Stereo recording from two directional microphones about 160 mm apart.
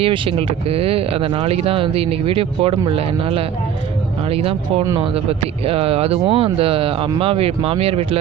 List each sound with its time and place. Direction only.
0.0 s speech: 35° right (ahead or behind)